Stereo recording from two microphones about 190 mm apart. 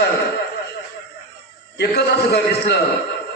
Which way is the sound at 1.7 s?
60° left (ahead or behind).